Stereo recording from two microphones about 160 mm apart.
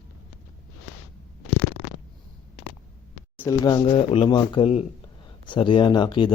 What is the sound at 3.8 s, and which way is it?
Speech, 35° left (ahead or behind).